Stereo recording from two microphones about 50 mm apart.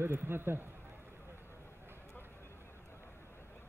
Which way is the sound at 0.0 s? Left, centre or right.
Right.